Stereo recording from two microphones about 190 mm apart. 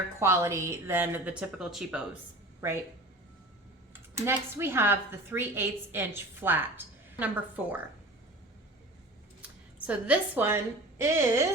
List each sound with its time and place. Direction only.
0.2 s a woman's voice: 15° right (ahead or behind)
4.3 s a woman's voice: 10° right (ahead or behind)
9.4 s a woman's voice: 5° right (ahead or behind)